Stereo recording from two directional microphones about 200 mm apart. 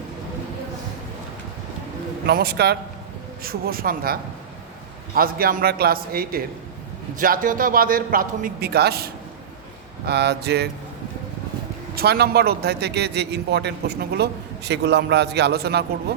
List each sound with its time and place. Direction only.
2.2 s a man's voice: 50° right (ahead or behind)
11.9 s a man's voice: 50° right (ahead or behind)